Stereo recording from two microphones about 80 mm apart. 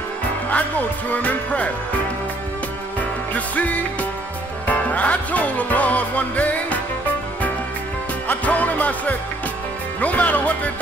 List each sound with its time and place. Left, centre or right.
0.5 s music: centre
3.0 s music: centre
8.3 s music: centre